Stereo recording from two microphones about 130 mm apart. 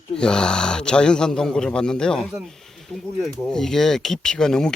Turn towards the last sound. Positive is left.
turn(degrees=5)  # may be behind; listen again after turning